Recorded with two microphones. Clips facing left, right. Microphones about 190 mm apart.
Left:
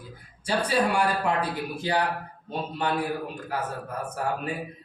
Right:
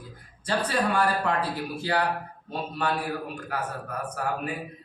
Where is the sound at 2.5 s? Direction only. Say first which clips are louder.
Even; 20° left (ahead or behind).